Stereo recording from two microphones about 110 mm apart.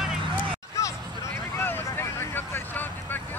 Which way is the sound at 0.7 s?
30° left (ahead or behind).